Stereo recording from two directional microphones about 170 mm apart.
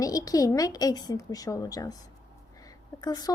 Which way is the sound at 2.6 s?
20° left (ahead or behind).